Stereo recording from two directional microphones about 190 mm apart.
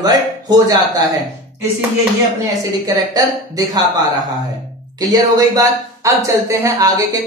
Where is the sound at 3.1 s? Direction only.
20° right (ahead or behind).